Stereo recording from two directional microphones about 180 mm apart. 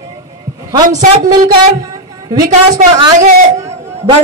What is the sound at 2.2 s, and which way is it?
Speech, 20° right (ahead or behind).